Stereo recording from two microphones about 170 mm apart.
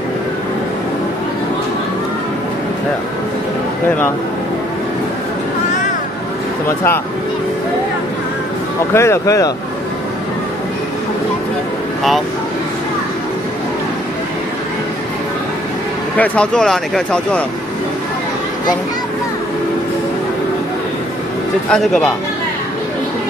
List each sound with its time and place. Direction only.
8.9 s speech: 15° left (ahead or behind)
16.2 s speech: 5° left (ahead or behind)
21.6 s speech: 5° left (ahead or behind)